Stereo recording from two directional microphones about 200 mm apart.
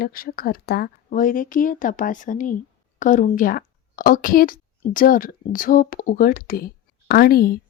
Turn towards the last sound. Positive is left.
turn(degrees=50)  # may be behind; listen again after turning